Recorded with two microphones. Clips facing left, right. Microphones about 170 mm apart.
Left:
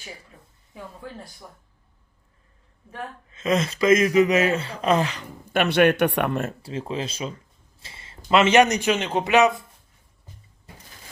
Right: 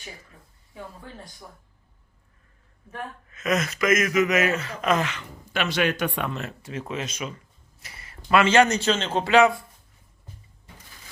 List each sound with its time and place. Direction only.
3.2 s speech: 30° left (ahead or behind)
5.5 s speech: 60° left (ahead or behind)
6.6 s a man's voice: 30° left (ahead or behind)